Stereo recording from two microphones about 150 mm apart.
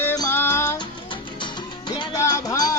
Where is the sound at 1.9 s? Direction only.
25° left (ahead or behind).